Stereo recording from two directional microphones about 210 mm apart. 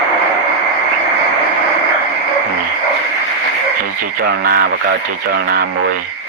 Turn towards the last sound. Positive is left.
turn(degrees=-50)  # may be behind; listen again after turning